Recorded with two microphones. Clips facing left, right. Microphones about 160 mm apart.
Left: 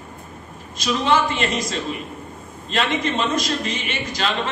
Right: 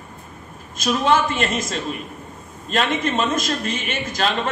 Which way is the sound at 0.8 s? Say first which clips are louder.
Right 1 dB; 50° right (ahead or behind).